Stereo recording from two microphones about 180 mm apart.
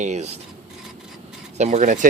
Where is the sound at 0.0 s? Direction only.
40° right (ahead or behind).